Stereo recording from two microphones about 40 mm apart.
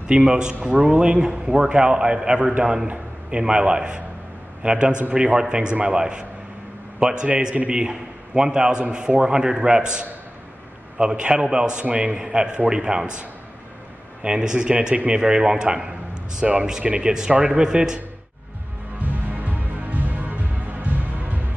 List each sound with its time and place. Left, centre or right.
0.0 s a man's voice: right
7.9 s a man's voice: centre
11.8 s speech: right
14.2 s a man's voice: right
16.8 s speech: right
19.4 s music: right